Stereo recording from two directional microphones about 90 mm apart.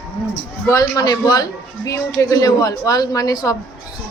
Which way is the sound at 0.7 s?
45° left (ahead or behind).